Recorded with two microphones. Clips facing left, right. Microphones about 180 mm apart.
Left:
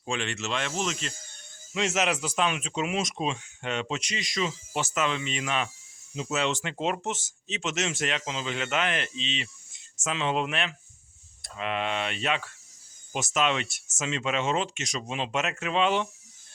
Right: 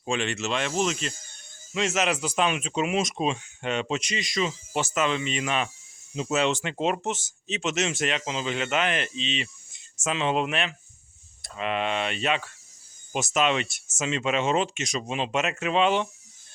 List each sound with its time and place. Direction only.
0.0 s speech: 15° right (ahead or behind)
1.8 s speech: 10° left (ahead or behind)
2.3 s speech: 10° right (ahead or behind)
6.3 s speech: 15° right (ahead or behind)
6.6 s speech: 5° right (ahead or behind)